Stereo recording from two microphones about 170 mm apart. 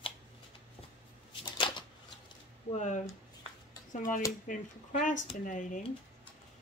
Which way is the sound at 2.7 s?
45° left (ahead or behind).